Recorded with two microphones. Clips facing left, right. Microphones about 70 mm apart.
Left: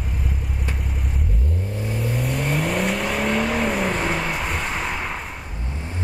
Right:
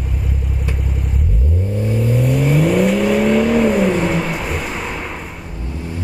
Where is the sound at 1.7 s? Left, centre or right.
Centre.